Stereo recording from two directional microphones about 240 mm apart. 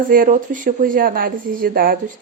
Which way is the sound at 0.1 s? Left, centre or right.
Right.